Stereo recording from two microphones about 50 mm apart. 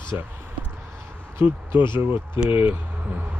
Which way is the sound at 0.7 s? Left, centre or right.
Right.